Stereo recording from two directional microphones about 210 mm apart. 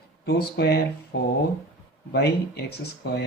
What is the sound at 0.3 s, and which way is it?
Speech, 50° left (ahead or behind).